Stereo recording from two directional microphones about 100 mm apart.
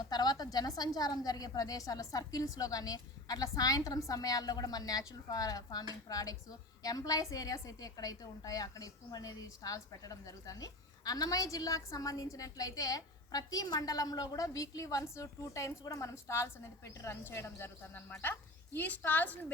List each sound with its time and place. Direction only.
0.1 s a woman's voice: 45° left (ahead or behind); by 19.5 s 15° left (ahead or behind)